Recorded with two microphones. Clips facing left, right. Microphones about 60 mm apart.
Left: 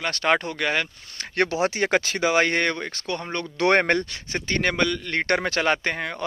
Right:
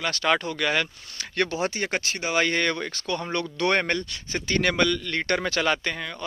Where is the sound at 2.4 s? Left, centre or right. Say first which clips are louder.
Right 1 dB; left.